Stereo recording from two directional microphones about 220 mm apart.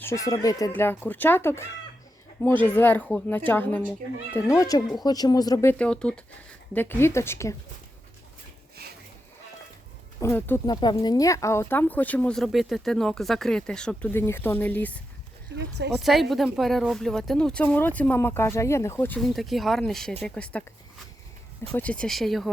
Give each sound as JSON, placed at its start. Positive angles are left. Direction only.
{"t": 0.0, "sound": "speech", "side_deg": 15}
{"t": 5.7, "sound": "speech", "side_deg": 5}
{"t": 8.8, "sound": "a sound", "side_deg": -45}
{"t": 10.2, "sound": "speech", "side_deg": 10}
{"t": 21.7, "sound": "speech", "side_deg": 5}